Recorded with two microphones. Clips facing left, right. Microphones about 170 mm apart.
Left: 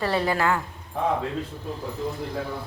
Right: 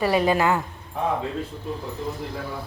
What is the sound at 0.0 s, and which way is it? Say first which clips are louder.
Speech: right 3 dB; 15° right (ahead or behind).